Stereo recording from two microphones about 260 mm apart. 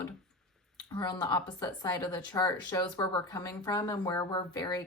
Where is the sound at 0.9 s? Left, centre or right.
Centre.